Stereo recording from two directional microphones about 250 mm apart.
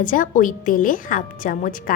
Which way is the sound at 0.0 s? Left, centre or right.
Left.